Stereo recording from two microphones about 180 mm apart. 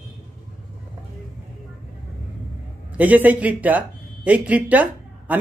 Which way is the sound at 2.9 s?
10° right (ahead or behind).